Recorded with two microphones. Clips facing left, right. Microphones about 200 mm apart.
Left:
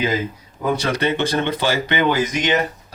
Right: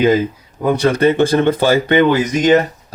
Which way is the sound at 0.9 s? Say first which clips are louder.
Right 8 dB; 50° right (ahead or behind).